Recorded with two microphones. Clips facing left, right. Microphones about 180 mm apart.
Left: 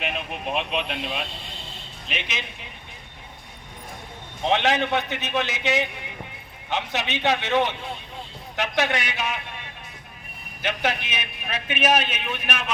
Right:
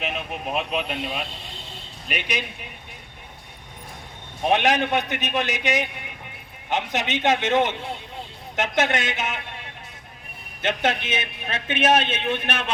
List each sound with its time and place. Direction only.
0.0 s a man's voice: centre (ahead or behind)
4.4 s a man's voice: 15° right (ahead or behind)
10.6 s a man's voice: 25° right (ahead or behind)